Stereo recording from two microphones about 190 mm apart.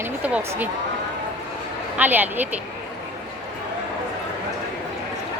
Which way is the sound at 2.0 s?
10° right (ahead or behind).